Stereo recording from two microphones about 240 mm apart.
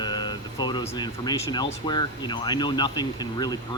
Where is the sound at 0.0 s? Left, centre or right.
Centre.